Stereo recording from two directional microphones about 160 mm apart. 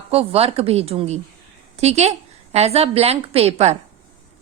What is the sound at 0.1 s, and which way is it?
A woman's voice, 35° right (ahead or behind).